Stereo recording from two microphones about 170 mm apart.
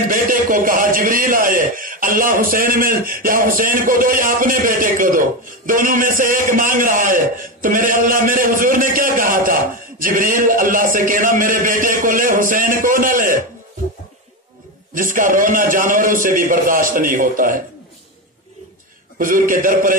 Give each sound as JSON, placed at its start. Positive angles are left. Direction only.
{"t": 0.1, "sound": "a man's voice", "side_deg": -55}
{"t": 15.0, "sound": "a man's voice", "side_deg": -50}
{"t": 19.1, "sound": "a man's voice", "side_deg": -55}